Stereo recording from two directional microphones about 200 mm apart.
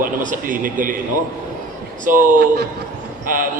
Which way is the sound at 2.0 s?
40° right (ahead or behind).